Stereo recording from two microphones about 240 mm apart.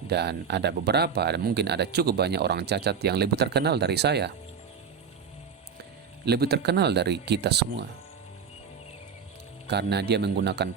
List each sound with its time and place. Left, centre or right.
0.1 s speech: right
6.2 s speech: right
9.6 s speech: right